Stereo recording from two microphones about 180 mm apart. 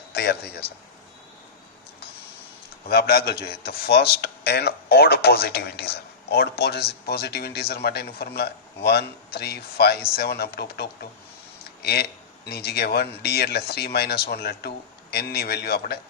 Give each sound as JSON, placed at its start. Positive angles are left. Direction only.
{"t": 0.1, "sound": "a man's voice", "side_deg": 65}
{"t": 2.9, "sound": "a man's voice", "side_deg": 60}